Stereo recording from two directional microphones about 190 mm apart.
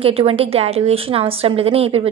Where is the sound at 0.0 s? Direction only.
30° right (ahead or behind).